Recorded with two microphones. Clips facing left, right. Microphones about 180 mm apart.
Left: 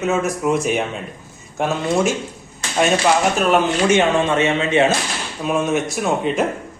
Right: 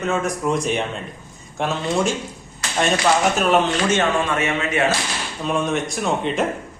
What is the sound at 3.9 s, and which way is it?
Speech, 20° left (ahead or behind).